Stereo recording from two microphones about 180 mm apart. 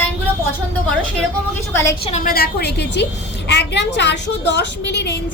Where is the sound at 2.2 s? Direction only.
60° left (ahead or behind); by 5.1 s 75° left (ahead or behind).